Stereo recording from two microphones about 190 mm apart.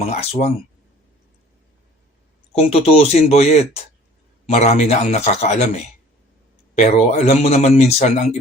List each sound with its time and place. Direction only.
0.0 s speech: 35° left (ahead or behind)
2.6 s speech: 30° left (ahead or behind)